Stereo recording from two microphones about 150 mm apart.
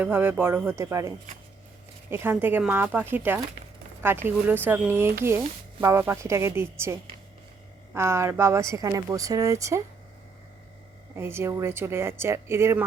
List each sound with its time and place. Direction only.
0.0 s a woman's voice: 15° right (ahead or behind)
11.2 s a woman's voice: 15° right (ahead or behind)